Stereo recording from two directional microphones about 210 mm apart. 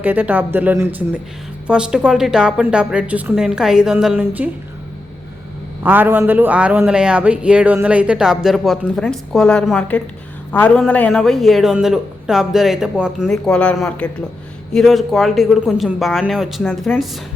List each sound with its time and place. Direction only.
0.0 s a man's voice: 10° right (ahead or behind)
5.8 s a man's voice: 10° right (ahead or behind)